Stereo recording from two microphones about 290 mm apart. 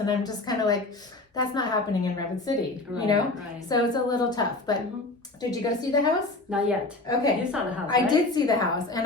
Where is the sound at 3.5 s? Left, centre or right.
Centre.